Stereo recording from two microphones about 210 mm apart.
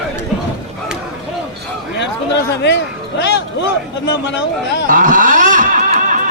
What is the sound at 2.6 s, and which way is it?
Speech, 55° left (ahead or behind).